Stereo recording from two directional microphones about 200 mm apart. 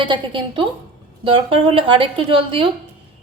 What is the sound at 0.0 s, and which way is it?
A woman's voice, 25° right (ahead or behind).